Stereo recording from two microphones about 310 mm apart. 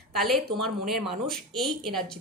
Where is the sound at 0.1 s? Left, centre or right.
Centre.